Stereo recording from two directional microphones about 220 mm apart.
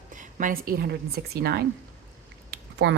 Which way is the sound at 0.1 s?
35° right (ahead or behind).